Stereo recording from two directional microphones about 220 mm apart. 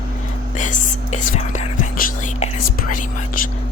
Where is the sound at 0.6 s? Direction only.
35° left (ahead or behind).